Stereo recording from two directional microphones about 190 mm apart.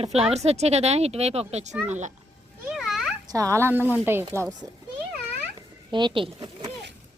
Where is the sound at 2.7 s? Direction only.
Centre (ahead or behind).